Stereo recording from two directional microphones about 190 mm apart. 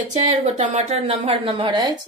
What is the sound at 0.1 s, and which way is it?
A woman's voice, 35° right (ahead or behind).